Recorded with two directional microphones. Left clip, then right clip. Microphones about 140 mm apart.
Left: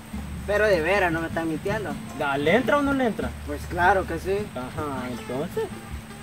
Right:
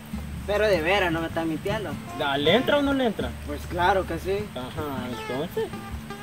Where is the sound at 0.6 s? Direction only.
10° right (ahead or behind).